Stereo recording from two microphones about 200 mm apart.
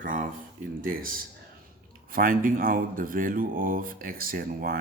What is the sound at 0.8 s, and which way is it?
Speech, 45° right (ahead or behind).